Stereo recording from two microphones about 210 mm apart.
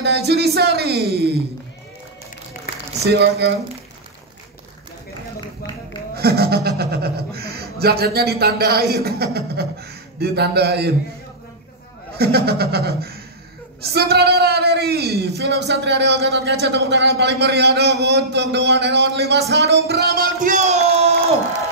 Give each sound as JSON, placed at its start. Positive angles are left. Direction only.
{"t": 0.0, "sound": "a man's voice", "side_deg": -55}
{"t": 3.1, "sound": "a man's voice", "side_deg": -55}
{"t": 6.1, "sound": "a man's voice", "side_deg": -50}
{"t": 12.2, "sound": "a man's voice", "side_deg": -50}